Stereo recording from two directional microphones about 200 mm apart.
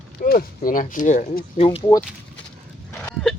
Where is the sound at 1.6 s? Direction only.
25° left (ahead or behind).